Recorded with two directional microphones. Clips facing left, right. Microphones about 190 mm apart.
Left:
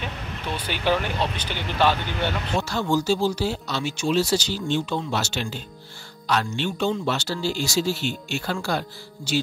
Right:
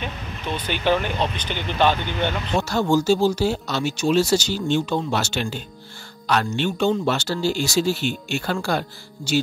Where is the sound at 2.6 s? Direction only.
45° right (ahead or behind).